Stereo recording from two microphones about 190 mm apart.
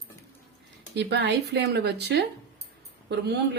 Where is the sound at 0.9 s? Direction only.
65° right (ahead or behind).